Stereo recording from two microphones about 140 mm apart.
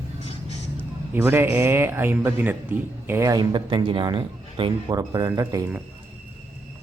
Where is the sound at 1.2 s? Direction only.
15° right (ahead or behind); by 5.0 s 35° right (ahead or behind).